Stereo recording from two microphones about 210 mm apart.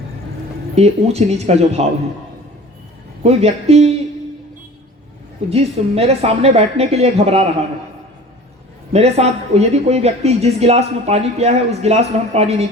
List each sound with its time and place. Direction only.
0.8 s speech: 30° right (ahead or behind)
3.2 s a woman's voice: 30° right (ahead or behind)
5.5 s a woman's voice: 30° right (ahead or behind)
8.9 s speech: 30° right (ahead or behind)